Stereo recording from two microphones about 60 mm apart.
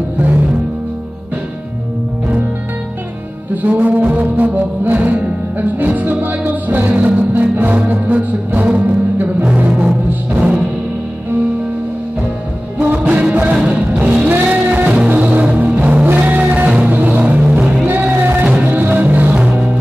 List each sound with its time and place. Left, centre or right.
3.6 s music: right
9.4 s timpani: centre
12.7 s music: right
18.2 s music: right